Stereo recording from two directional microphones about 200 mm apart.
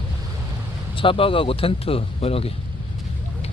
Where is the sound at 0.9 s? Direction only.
25° left (ahead or behind).